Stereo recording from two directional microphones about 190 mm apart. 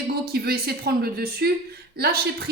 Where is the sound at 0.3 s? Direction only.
55° right (ahead or behind).